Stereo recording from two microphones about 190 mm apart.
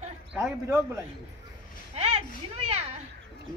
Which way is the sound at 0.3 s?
5° right (ahead or behind).